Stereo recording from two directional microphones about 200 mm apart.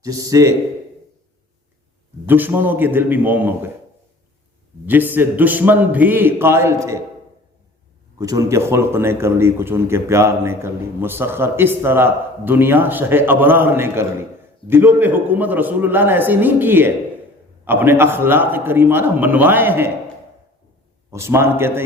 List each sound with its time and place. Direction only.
0.0 s a man's voice: 15° right (ahead or behind)
2.2 s a man's voice: 10° right (ahead or behind)
4.9 s a man's voice: 10° right (ahead or behind)
8.2 s a man's voice: 15° right (ahead or behind)
21.1 s a man's voice: 15° right (ahead or behind)